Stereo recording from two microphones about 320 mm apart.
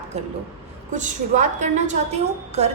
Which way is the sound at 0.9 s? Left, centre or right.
Right.